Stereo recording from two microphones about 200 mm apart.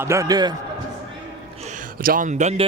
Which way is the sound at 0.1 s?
15° right (ahead or behind).